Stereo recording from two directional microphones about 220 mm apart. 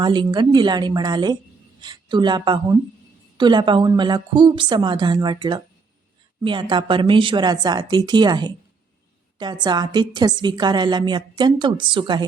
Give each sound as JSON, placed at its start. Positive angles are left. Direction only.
{"t": 0.0, "sound": "a woman's voice", "side_deg": -20}